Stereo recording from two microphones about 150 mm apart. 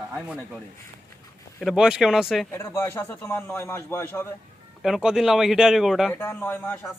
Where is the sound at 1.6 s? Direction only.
5° right (ahead or behind).